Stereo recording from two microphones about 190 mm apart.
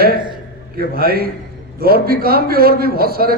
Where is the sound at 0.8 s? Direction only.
50° right (ahead or behind).